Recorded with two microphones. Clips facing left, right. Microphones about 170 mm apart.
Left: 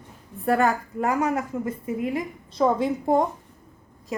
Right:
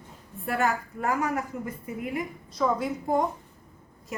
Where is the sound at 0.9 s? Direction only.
25° left (ahead or behind).